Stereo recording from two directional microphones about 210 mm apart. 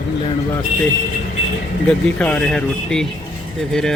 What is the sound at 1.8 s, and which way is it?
Speech, 5° left (ahead or behind).